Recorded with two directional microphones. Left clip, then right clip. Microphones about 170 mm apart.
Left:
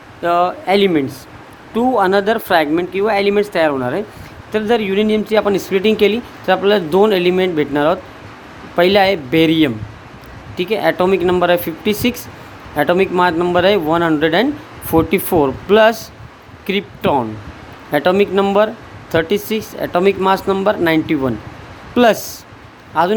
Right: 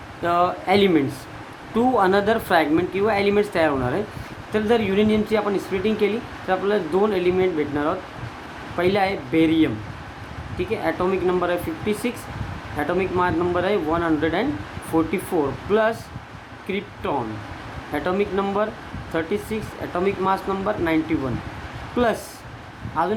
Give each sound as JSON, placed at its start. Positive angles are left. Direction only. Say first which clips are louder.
{"t": 0.2, "sound": "speech", "louder": "left 5 dB", "side_deg": 45}